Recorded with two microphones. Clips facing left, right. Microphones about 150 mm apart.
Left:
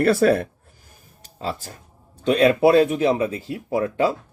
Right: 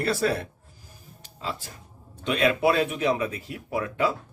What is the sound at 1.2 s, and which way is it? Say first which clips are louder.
Music: left 5 dB; 40° left (ahead or behind).